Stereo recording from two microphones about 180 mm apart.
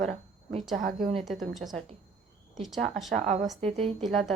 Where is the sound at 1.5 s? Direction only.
Centre (ahead or behind).